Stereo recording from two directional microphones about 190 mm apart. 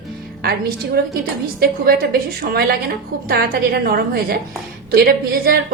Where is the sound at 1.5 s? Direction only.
50° right (ahead or behind).